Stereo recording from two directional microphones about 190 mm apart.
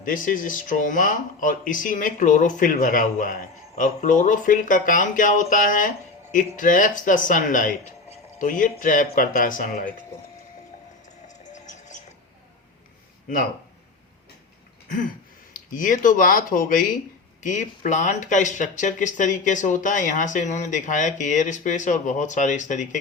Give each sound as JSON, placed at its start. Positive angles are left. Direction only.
{"t": 0.0, "sound": "speech", "side_deg": 45}
{"t": 11.3, "sound": "music", "side_deg": 40}
{"t": 15.5, "sound": "speech", "side_deg": 45}